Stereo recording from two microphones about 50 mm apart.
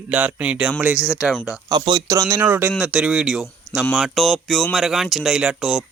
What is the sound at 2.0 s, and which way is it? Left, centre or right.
Speech, right.